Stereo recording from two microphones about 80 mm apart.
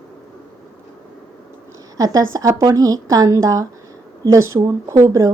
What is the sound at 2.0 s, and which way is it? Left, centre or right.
A woman's voice, right.